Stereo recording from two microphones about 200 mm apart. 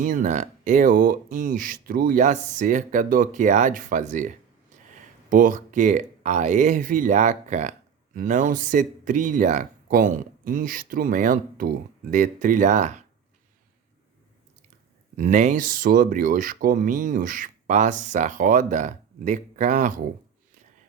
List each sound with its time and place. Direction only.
0.0 s speech: 40° right (ahead or behind)
15.1 s speech: 40° right (ahead or behind)